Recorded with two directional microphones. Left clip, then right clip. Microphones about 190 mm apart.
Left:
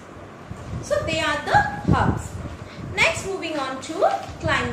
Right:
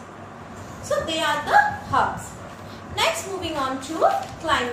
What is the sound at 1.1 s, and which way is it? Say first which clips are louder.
Speech: right 2 dB; 10° left (ahead or behind).